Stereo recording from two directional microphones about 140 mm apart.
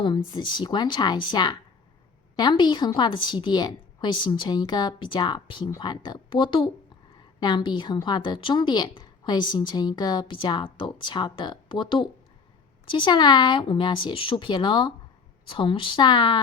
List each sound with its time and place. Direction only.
0.0 s a woman's voice: 35° left (ahead or behind)